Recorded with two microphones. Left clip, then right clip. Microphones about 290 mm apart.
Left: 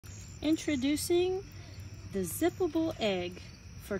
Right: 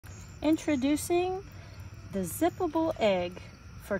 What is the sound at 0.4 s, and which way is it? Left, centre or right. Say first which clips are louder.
Speech: right 3 dB; centre.